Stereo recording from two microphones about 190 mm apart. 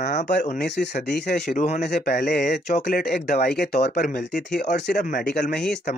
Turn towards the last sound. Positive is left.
turn(degrees=50)  # may be behind; listen again after turning